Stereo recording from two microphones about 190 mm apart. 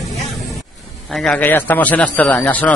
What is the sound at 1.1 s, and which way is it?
A man's voice, 5° left (ahead or behind).